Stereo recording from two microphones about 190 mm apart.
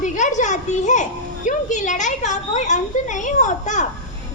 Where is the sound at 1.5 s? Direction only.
40° left (ahead or behind).